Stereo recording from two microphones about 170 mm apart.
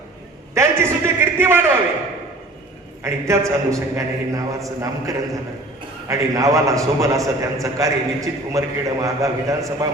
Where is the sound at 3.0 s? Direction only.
15° right (ahead or behind).